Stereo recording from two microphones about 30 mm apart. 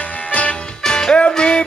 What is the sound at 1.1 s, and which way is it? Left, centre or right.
Music, left.